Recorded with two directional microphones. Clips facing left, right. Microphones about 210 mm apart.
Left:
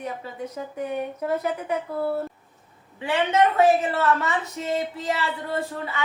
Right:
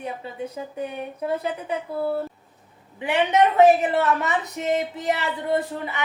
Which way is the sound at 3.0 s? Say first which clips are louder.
Right 1 dB; 20° right (ahead or behind).